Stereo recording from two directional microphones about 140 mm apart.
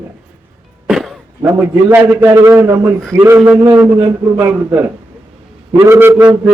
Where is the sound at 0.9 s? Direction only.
Centre (ahead or behind).